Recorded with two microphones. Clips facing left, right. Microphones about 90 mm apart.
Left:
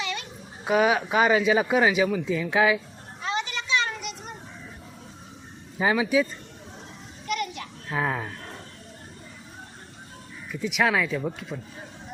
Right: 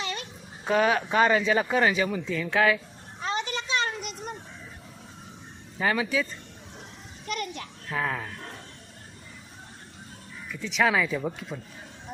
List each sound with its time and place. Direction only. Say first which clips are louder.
0.0 s dog: left 2 dB; 40° right (ahead or behind)
0.6 s speech: left 2 dB; 10° left (ahead or behind)
3.2 s a sound: even; 40° right (ahead or behind)
5.8 s speech: left 4 dB; 10° left (ahead or behind)
7.3 s children playing: left 3 dB; 40° right (ahead or behind)
7.9 s speech: left 2 dB; 15° left (ahead or behind)
10.5 s speech: left 1 dB; 10° left (ahead or behind)